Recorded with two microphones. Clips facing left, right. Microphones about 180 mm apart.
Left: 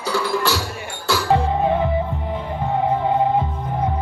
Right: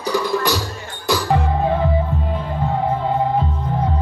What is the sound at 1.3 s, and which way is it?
Music, 15° left (ahead or behind).